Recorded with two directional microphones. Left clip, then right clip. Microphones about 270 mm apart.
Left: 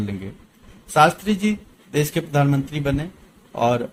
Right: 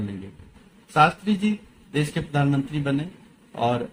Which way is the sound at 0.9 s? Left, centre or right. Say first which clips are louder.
Left 3 dB; left.